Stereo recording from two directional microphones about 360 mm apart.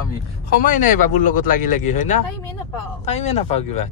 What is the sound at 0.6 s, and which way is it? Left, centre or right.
Speech, left.